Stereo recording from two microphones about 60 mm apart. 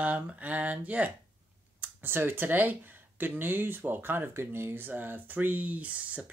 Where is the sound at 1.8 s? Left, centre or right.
Right.